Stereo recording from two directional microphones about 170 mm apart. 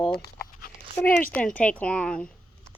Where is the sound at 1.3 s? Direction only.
5° left (ahead or behind).